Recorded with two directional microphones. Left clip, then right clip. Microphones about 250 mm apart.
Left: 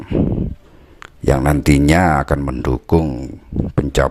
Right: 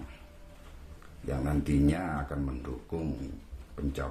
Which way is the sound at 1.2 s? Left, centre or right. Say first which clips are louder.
Left 18 dB; left.